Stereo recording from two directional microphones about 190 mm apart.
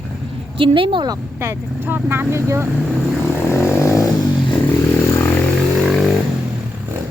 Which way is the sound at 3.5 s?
15° left (ahead or behind).